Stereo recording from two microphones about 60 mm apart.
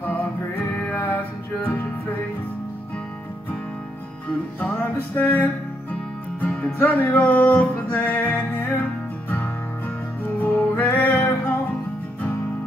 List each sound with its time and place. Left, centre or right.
0.0 s music: left
5.2 s music: left
10.4 s music: left